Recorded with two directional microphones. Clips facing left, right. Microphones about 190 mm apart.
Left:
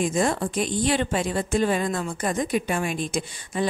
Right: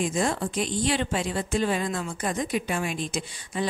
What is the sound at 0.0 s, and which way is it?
A woman's voice, 50° left (ahead or behind).